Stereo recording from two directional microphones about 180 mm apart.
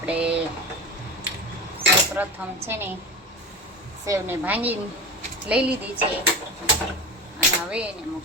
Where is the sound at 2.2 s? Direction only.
10° right (ahead or behind).